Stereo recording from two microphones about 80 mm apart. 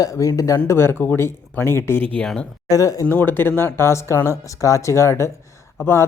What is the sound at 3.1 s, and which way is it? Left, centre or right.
Speech, left.